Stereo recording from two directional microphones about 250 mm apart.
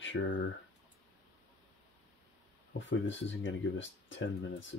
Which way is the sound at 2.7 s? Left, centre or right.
Left.